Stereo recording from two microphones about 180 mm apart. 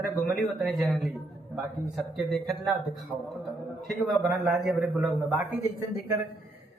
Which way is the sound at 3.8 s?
Centre (ahead or behind).